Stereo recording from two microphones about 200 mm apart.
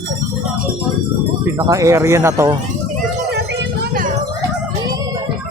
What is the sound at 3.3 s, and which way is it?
Music, 60° right (ahead or behind).